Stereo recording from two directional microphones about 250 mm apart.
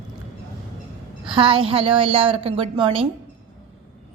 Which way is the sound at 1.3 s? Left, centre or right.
Right.